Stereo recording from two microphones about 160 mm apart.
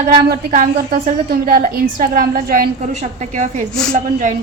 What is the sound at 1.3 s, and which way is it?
A woman's voice, 65° right (ahead or behind).